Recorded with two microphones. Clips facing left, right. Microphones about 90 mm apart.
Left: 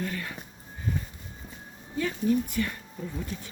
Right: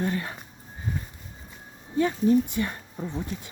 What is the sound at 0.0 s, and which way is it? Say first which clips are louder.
Speech: right 5 dB; 30° right (ahead or behind).